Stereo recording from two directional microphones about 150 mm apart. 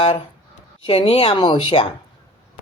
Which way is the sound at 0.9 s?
40° left (ahead or behind).